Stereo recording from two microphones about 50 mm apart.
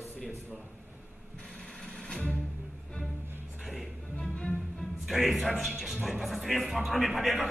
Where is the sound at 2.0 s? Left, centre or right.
Centre.